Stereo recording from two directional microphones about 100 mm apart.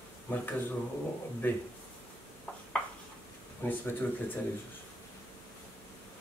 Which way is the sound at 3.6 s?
20° left (ahead or behind).